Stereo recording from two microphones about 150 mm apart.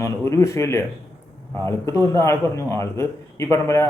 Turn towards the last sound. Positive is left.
turn(degrees=15)  # may be behind; listen again after turning